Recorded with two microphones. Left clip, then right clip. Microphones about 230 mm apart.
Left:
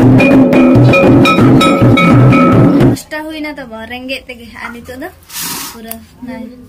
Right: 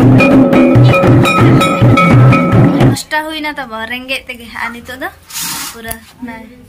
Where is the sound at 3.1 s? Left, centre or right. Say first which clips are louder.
Right 5 dB; centre.